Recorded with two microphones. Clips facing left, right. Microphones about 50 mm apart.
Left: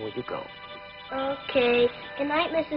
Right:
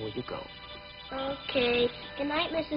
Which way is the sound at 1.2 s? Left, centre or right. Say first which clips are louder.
Left 5 dB; centre.